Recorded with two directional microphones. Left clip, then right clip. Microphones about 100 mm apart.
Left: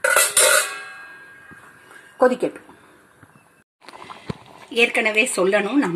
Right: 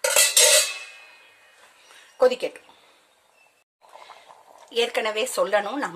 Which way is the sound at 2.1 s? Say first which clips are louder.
Left 3 dB; 15° right (ahead or behind).